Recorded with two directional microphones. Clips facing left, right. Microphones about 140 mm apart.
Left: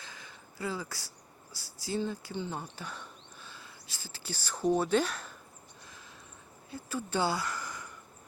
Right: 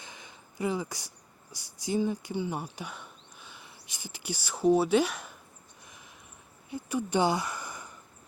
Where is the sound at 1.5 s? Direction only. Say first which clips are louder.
Right 5 dB; 20° right (ahead or behind).